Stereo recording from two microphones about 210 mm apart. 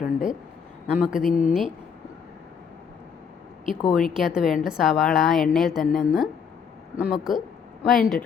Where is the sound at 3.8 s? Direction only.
Centre (ahead or behind).